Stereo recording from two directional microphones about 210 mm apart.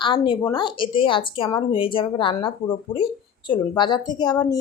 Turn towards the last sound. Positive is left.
turn(degrees=20)  # may be behind; listen again after turning